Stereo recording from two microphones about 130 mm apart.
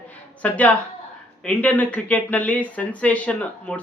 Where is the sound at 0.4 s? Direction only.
10° left (ahead or behind).